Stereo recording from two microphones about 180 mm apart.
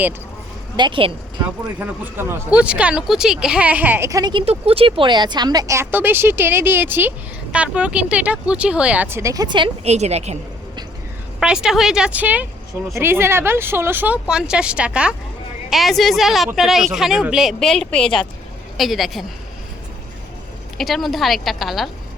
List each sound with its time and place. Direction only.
0.8 s a woman's voice: 30° right (ahead or behind)
1.8 s speech: 10° right (ahead or behind); by 10.3 s 35° right (ahead or behind)
11.3 s speech: 5° right (ahead or behind)
20.7 s speech: centre (ahead or behind)